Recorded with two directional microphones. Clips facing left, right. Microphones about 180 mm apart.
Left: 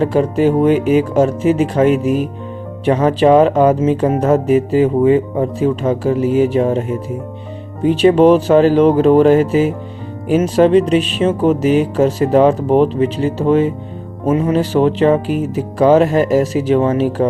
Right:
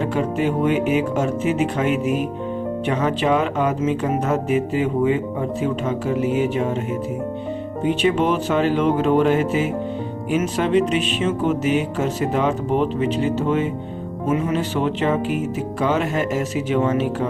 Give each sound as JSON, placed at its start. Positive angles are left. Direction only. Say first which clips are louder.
{"t": 0.0, "sound": "speech", "louder": "left 7 dB", "side_deg": 35}
{"t": 7.9, "sound": "speech", "louder": "left 10 dB", "side_deg": 35}